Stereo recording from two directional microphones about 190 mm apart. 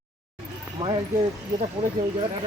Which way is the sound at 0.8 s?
25° right (ahead or behind).